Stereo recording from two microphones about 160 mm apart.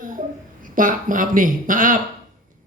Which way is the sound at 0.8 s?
55° right (ahead or behind).